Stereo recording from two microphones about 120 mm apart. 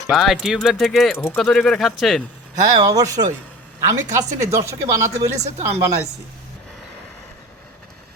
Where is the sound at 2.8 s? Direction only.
30° right (ahead or behind).